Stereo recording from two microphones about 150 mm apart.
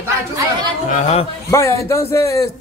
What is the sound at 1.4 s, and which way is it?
A man's voice, 20° left (ahead or behind).